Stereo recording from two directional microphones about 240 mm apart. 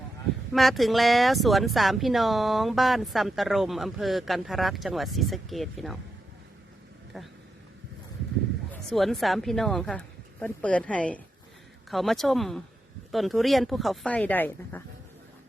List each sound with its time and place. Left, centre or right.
0.5 s speech: centre
8.7 s speech: centre